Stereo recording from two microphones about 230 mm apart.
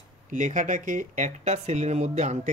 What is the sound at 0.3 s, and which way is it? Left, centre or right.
Speech, right.